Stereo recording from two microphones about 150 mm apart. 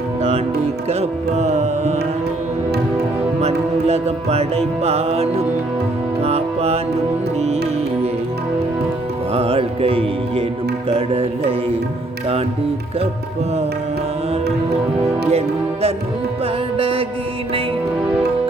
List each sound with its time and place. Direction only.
1.4 s music: 50° right (ahead or behind)
3.4 s music: 45° right (ahead or behind)
9.3 s music: 40° right (ahead or behind)
15.2 s music: 40° right (ahead or behind)